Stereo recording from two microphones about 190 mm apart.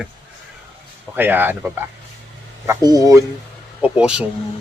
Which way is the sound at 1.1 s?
10° right (ahead or behind).